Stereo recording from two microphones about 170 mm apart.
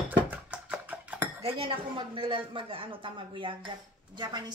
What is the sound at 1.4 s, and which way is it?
A woman's voice, 35° right (ahead or behind).